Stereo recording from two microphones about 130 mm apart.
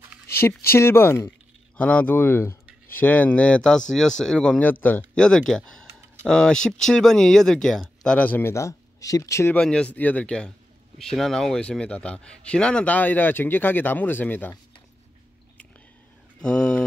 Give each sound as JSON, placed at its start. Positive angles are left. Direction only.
{"t": 0.4, "sound": "speech", "side_deg": 20}
{"t": 9.5, "sound": "speech", "side_deg": 5}
{"t": 16.3, "sound": "speech", "side_deg": 5}